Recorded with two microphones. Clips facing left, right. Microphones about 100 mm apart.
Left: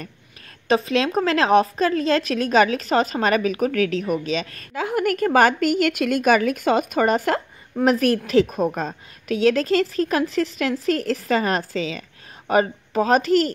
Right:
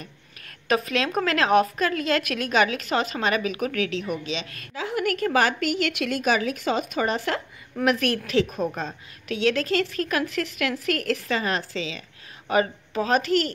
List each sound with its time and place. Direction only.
0.7 s a woman's voice: 30° left (ahead or behind)